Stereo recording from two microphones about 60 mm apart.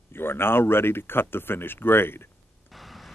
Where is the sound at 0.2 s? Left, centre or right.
Left.